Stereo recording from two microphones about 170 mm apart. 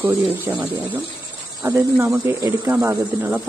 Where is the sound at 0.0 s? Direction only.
15° right (ahead or behind).